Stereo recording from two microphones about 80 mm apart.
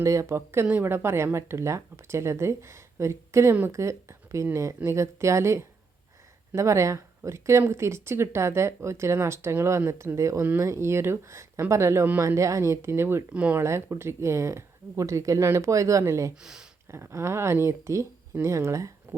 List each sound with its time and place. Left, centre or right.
0.0 s speech: right
13.3 s speech: centre
13.6 s speech: right
16.4 s speech: centre
16.9 s speech: right